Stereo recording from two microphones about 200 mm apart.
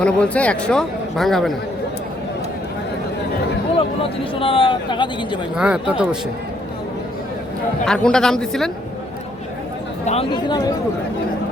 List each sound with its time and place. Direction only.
0.0 s a man's voice: 5° left (ahead or behind)
3.8 s speech: 25° left (ahead or behind)
5.5 s a man's voice: 5° right (ahead or behind)
7.9 s a man's voice: 5° left (ahead or behind)
10.1 s speech: 25° left (ahead or behind)